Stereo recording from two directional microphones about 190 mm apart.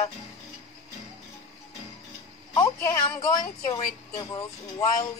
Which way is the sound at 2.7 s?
10° left (ahead or behind).